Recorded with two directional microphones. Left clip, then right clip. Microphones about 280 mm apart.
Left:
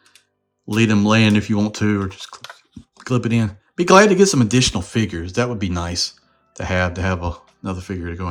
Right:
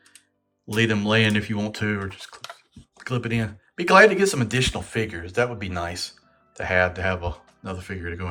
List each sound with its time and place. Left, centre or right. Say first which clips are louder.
0.9 s speech: left 4 dB; centre
2.4 s a sound: left 2 dB; centre
3.0 s speech: left 6 dB; centre